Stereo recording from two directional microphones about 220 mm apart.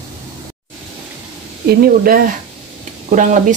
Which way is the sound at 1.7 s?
40° right (ahead or behind).